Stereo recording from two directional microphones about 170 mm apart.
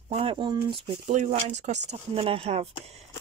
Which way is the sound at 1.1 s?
45° right (ahead or behind).